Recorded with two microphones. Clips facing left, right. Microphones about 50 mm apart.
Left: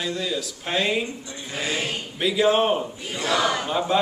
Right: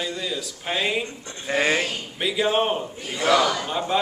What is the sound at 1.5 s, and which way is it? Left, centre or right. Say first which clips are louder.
Speech: right 6 dB; right.